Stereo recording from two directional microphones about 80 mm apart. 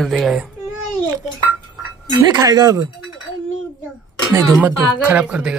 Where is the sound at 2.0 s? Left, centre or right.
Right.